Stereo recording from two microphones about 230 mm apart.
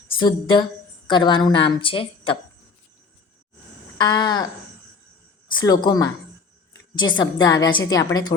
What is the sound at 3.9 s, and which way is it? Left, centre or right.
Speech, centre.